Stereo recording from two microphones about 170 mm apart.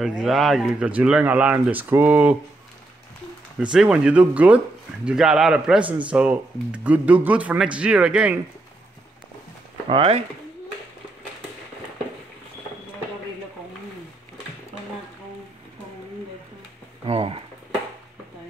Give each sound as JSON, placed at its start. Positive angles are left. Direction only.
{"t": 0.0, "sound": "speech", "side_deg": 0}
{"t": 3.7, "sound": "speech", "side_deg": -5}
{"t": 9.8, "sound": "speech", "side_deg": -30}
{"t": 17.0, "sound": "speech", "side_deg": -35}